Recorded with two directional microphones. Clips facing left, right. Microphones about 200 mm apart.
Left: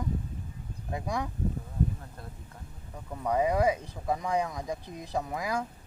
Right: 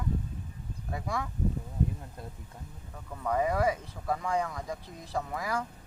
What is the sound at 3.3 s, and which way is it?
Speech, 15° left (ahead or behind).